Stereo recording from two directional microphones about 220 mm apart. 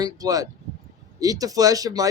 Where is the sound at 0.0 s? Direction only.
15° right (ahead or behind).